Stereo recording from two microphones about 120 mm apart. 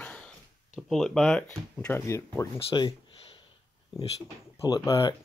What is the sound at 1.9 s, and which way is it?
Speech, 20° left (ahead or behind).